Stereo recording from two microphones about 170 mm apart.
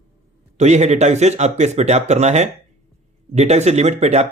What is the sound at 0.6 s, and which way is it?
Speech, 40° right (ahead or behind).